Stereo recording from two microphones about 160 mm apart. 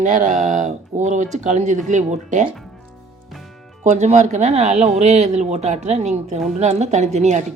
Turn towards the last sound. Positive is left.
turn(degrees=-45)  # may be behind; listen again after turning